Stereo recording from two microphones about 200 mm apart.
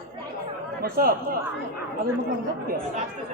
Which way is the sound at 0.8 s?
50° right (ahead or behind).